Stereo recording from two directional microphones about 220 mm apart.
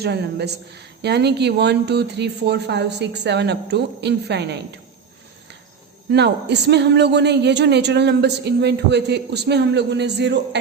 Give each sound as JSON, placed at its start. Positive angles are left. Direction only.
{"t": 0.0, "sound": "a woman's voice", "side_deg": -50}
{"t": 6.1, "sound": "a woman's voice", "side_deg": -50}